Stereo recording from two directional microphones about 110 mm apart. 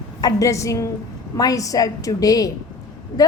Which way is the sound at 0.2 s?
35° left (ahead or behind).